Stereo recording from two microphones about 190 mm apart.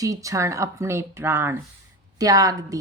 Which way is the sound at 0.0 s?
15° right (ahead or behind).